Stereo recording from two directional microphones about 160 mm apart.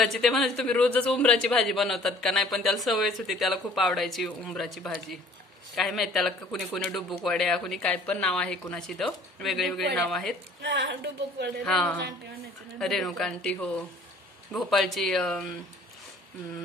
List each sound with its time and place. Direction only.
0.0 s a man's voice: centre (ahead or behind)
10.9 s a woman's voice: 90° right
11.6 s a man's voice: 5° left (ahead or behind)